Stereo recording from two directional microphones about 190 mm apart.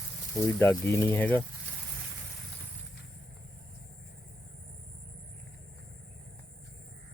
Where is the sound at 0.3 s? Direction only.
10° left (ahead or behind).